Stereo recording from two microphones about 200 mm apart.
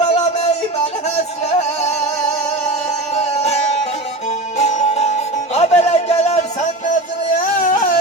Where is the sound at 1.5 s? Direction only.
35° left (ahead or behind).